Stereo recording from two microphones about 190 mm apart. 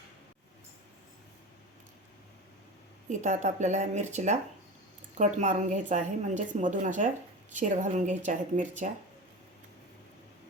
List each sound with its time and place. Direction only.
3.1 s a woman's voice: 40° right (ahead or behind)